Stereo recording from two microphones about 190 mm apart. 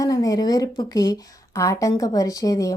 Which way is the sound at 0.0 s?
20° left (ahead or behind).